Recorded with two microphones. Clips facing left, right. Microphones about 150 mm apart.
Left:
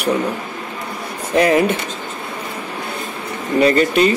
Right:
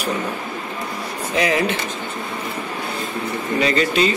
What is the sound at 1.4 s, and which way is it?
Speech, 50° left (ahead or behind).